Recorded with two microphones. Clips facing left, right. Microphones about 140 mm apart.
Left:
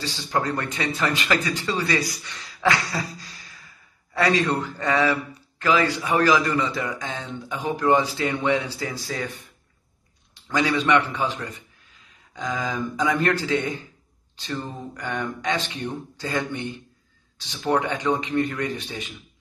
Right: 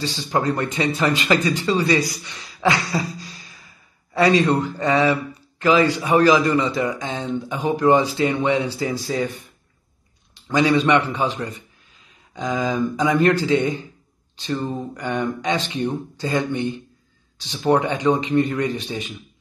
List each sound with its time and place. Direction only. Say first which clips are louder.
0.0 s a man's voice: right 4 dB; 20° right (ahead or behind)
10.5 s a man's voice: right 4 dB; 20° right (ahead or behind)